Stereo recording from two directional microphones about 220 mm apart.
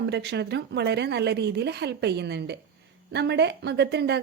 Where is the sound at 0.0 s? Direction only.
50° right (ahead or behind).